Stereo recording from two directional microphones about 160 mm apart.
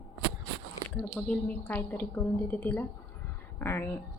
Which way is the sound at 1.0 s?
5° left (ahead or behind).